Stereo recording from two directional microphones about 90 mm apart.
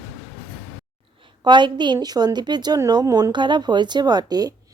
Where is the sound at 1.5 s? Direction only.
60° right (ahead or behind); by 3.3 s 45° right (ahead or behind).